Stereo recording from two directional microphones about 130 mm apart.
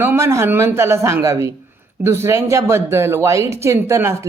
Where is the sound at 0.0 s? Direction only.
20° right (ahead or behind).